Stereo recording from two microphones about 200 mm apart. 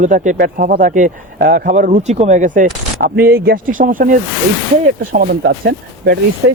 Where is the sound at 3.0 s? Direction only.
50° right (ahead or behind).